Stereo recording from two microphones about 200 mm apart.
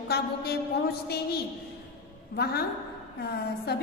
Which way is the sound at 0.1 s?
55° left (ahead or behind).